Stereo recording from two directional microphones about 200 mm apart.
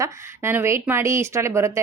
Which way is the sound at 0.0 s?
15° right (ahead or behind).